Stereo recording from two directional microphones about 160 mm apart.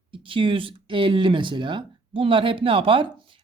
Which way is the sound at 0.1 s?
30° right (ahead or behind).